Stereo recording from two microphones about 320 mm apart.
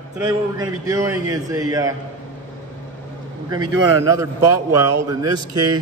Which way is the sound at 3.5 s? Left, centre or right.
Centre.